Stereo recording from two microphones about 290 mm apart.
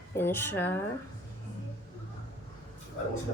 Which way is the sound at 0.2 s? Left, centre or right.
Centre.